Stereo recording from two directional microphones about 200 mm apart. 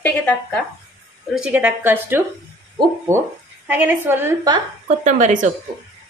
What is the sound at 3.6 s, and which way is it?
Speech, 10° right (ahead or behind).